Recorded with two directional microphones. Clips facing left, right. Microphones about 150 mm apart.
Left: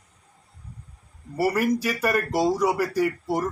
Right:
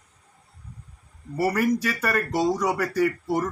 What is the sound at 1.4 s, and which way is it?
Speech, 10° left (ahead or behind).